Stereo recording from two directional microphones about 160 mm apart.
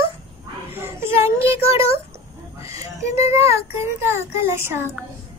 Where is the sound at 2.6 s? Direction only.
20° right (ahead or behind).